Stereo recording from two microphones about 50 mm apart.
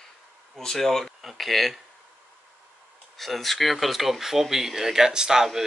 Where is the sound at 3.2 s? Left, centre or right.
Centre.